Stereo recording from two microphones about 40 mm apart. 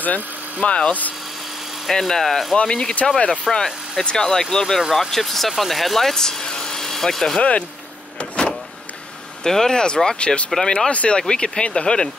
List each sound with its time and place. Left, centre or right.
0.0 s speech: left
0.7 s speech: left
1.9 s speech: centre
3.5 s speech: centre
4.0 s speech: left
7.3 s speech: left
8.2 s power windows: left
9.4 s speech: centre
10.0 s speech: left
10.5 s speech: centre
10.9 s speech: left